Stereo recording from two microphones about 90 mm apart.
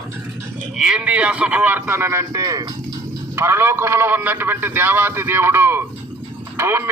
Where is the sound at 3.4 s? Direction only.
30° right (ahead or behind).